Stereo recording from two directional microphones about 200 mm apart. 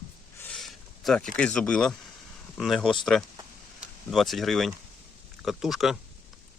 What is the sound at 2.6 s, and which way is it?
Speech, centre (ahead or behind).